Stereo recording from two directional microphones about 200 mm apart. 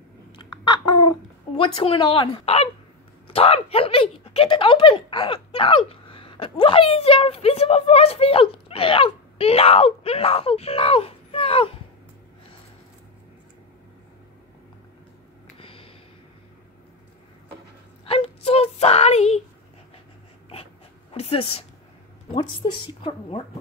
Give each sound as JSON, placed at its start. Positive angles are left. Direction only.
{"t": 1.6, "sound": "speech", "side_deg": 25}
{"t": 15.6, "sound": "a sound", "side_deg": 30}
{"t": 18.0, "sound": "speech", "side_deg": 30}
{"t": 21.1, "sound": "a woman's voice", "side_deg": 30}